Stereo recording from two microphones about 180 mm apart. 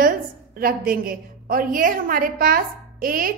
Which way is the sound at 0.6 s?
55° right (ahead or behind).